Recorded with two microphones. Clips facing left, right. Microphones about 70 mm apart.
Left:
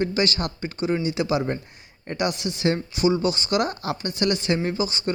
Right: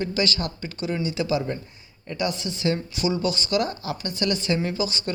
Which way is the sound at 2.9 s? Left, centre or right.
Left.